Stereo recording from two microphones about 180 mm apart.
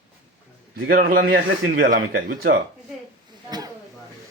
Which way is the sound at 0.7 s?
55° right (ahead or behind).